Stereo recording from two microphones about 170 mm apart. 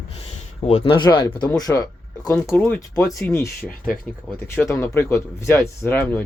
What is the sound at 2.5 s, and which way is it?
Speech, 10° left (ahead or behind).